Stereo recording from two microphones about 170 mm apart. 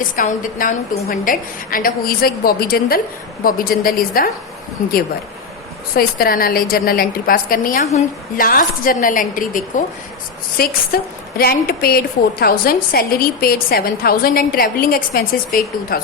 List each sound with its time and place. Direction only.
0.0 s a woman's voice: 55° left (ahead or behind)
5.9 s a woman's voice: 60° left (ahead or behind)